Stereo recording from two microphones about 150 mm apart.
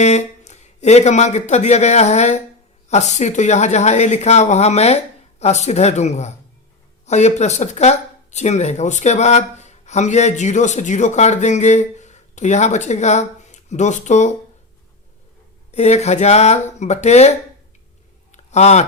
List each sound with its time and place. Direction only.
0.0 s speech: 50° left (ahead or behind)
15.7 s speech: 45° left (ahead or behind)
18.3 s a sound: 50° left (ahead or behind)